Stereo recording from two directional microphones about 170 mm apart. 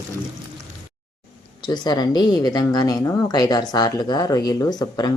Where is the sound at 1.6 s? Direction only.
25° left (ahead or behind).